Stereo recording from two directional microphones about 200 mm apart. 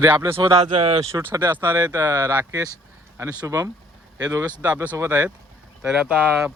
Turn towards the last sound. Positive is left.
turn(degrees=-5)  # may be behind; listen again after turning